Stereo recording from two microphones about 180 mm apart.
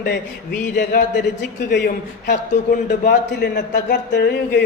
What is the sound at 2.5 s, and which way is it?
Speech, 45° left (ahead or behind).